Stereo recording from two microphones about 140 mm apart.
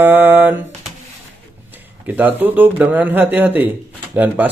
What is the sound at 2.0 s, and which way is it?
Speech, 15° right (ahead or behind).